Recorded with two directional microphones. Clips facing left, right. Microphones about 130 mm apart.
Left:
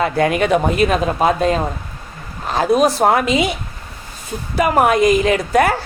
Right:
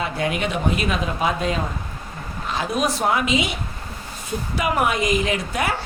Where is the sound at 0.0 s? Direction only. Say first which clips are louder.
Left 8 dB; 50° left (ahead or behind).